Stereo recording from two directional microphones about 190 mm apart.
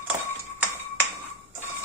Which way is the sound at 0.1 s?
15° right (ahead or behind).